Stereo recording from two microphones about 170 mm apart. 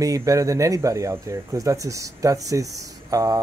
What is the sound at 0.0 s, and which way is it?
Speech, 20° right (ahead or behind).